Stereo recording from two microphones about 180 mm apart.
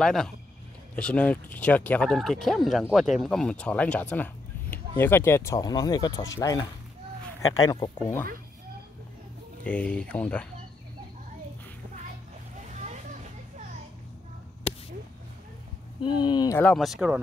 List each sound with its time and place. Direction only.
0.0 s speech: centre (ahead or behind)
9.7 s speech: 5° left (ahead or behind)
12.6 s a sound: 40° right (ahead or behind)
14.7 s a sound: 35° left (ahead or behind)
16.0 s speech: 25° left (ahead or behind)
16.5 s speech: 5° left (ahead or behind)